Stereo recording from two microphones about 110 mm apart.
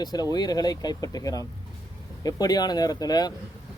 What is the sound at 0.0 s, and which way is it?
Speech, 35° left (ahead or behind).